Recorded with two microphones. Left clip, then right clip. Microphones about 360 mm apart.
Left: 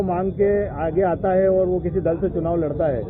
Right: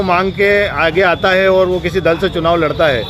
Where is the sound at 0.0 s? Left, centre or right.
Right.